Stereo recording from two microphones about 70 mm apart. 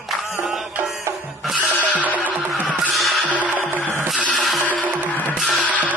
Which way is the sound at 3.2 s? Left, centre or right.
Right.